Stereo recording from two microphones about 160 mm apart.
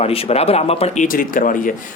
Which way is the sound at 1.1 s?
60° left (ahead or behind).